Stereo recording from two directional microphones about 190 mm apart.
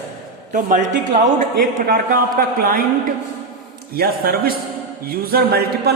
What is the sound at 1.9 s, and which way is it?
Speech, 50° right (ahead or behind).